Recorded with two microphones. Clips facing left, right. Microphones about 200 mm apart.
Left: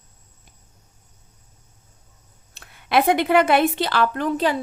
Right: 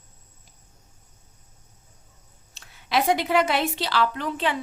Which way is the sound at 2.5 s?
55° left (ahead or behind).